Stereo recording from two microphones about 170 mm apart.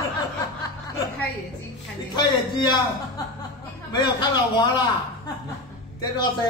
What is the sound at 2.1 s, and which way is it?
Speech, 25° left (ahead or behind).